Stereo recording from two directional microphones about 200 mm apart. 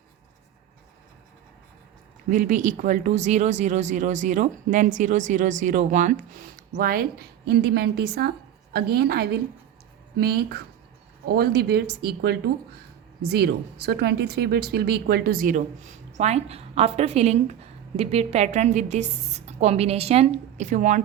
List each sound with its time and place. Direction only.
2.3 s a woman's voice: 40° right (ahead or behind)